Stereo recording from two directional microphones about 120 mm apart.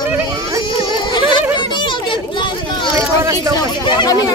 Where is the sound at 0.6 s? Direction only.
40° left (ahead or behind).